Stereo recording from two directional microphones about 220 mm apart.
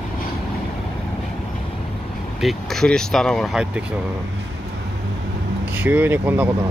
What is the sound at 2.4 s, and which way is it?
Speech, centre (ahead or behind).